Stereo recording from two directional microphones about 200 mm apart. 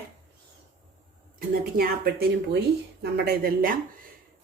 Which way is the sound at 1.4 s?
50° right (ahead or behind).